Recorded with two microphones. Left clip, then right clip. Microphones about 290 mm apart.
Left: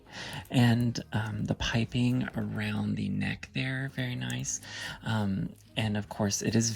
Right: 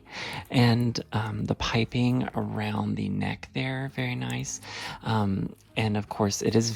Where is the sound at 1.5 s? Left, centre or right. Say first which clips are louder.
Right 4 dB; centre.